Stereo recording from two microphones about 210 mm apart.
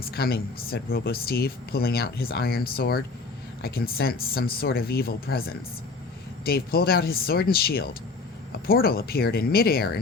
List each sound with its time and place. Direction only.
0.0 s speech: 45° left (ahead or behind)